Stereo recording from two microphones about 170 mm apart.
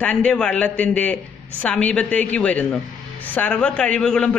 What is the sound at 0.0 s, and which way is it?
Speech, 5° left (ahead or behind).